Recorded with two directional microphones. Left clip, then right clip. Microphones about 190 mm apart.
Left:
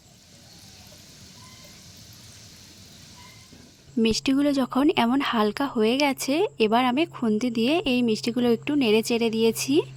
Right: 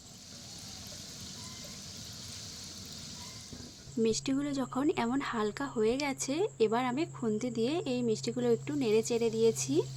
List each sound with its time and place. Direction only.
4.0 s speech: 50° left (ahead or behind)